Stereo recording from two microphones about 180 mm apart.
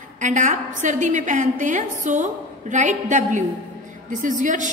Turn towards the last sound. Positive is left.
turn(degrees=-45)  # may be behind; listen again after turning